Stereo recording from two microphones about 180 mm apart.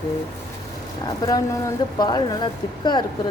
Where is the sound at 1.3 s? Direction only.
20° left (ahead or behind).